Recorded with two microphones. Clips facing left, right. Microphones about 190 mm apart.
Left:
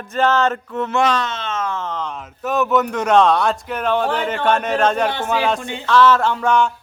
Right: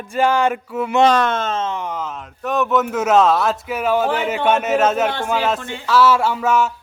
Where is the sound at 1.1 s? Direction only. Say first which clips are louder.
Right 5 dB; 50° right (ahead or behind).